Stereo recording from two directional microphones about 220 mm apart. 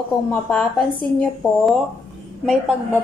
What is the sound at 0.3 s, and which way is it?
Speech, 5° left (ahead or behind).